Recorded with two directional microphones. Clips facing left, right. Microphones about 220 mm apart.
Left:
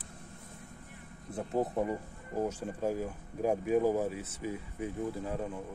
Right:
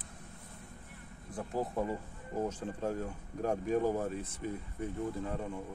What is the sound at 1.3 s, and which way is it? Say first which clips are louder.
Speech: left 3 dB; 20° left (ahead or behind).